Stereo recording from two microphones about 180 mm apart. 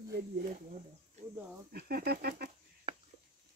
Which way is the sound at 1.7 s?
60° right (ahead or behind).